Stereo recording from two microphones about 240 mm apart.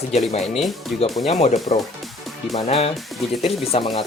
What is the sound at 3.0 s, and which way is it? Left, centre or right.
Speech, centre.